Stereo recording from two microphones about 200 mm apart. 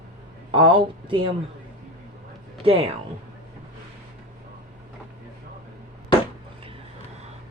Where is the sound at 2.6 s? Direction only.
30° right (ahead or behind).